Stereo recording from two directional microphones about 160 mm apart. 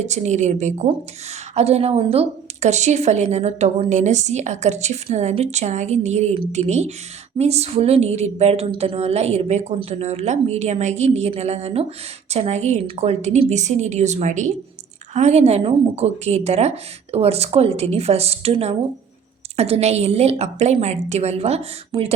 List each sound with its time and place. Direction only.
0.0 s a woman's voice: 45° right (ahead or behind)